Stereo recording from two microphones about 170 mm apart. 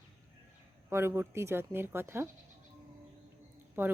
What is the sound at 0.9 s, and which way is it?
Speech, 15° right (ahead or behind).